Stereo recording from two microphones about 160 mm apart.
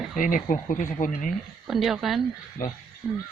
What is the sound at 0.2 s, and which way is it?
Speech, 55° left (ahead or behind).